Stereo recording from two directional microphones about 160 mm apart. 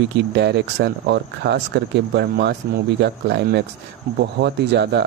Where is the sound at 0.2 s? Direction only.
90° right.